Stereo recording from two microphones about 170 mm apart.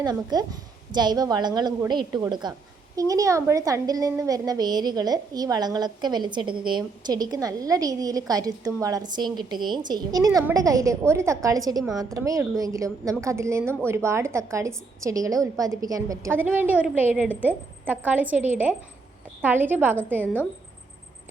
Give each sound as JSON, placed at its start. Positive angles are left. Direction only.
{"t": 0.0, "sound": "a woman's voice", "side_deg": -25}